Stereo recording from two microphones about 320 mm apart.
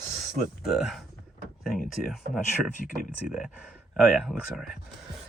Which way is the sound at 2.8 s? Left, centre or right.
Left.